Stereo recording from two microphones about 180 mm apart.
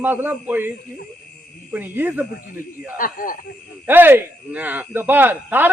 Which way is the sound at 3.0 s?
50° left (ahead or behind).